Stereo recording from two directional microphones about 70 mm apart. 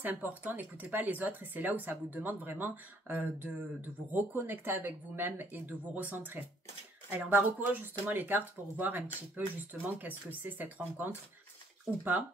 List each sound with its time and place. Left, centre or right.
0.0 s speech: right